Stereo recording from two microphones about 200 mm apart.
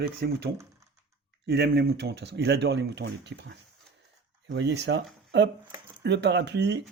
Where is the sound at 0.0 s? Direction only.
55° right (ahead or behind).